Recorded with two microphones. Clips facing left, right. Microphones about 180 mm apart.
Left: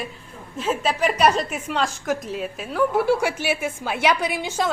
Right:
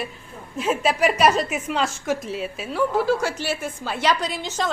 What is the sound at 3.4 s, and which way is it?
A woman's voice, 10° left (ahead or behind).